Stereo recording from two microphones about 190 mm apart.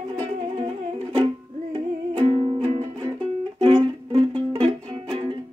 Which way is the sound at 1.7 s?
30° right (ahead or behind).